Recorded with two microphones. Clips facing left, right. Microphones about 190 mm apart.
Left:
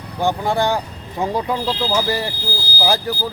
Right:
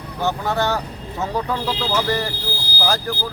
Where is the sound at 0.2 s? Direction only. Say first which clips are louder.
Left 3 dB; 10° left (ahead or behind).